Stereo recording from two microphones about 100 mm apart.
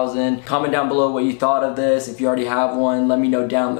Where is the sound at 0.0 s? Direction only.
15° left (ahead or behind).